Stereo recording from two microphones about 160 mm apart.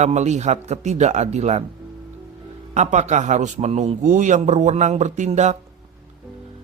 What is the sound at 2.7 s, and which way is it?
A man's voice, 45° right (ahead or behind).